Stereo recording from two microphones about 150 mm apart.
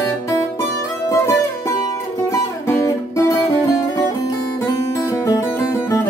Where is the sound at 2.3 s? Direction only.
20° left (ahead or behind).